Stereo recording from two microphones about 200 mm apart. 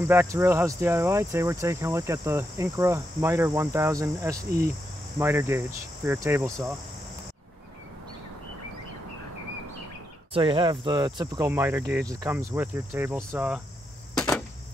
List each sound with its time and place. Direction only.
0.1 s speech: 10° right (ahead or behind)
10.3 s speech: 25° right (ahead or behind); by 13.6 s 10° right (ahead or behind)